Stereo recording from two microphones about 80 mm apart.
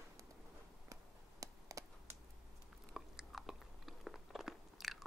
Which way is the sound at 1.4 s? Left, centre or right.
Right.